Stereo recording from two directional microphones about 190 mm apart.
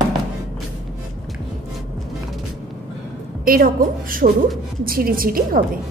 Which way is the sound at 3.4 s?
50° right (ahead or behind).